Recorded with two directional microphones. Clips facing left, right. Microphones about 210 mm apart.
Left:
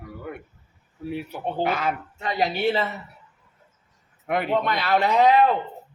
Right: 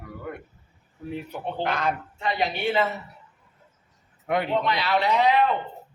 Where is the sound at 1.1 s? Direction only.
5° left (ahead or behind).